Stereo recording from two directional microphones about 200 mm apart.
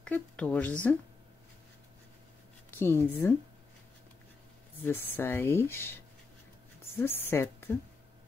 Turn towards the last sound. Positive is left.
turn(degrees=10)  # may be behind; listen again after turning